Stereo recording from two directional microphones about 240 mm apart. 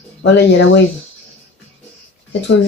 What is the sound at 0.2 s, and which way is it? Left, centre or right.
Speech, left.